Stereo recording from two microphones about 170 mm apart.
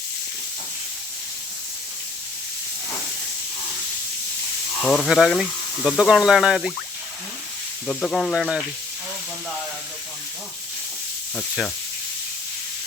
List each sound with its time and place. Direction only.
4.8 s speech: centre (ahead or behind)
7.9 s speech: 5° left (ahead or behind)
11.3 s speech: centre (ahead or behind)